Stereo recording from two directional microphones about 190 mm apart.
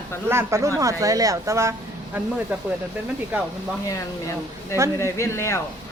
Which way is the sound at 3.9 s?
15° left (ahead or behind).